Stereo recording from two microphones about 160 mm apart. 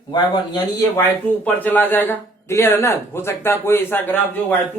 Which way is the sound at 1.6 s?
10° left (ahead or behind).